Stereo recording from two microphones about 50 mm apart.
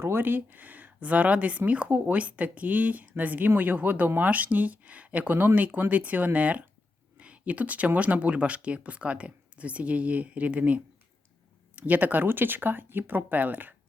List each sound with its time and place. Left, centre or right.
0.0 s speech: right
11.8 s speech: right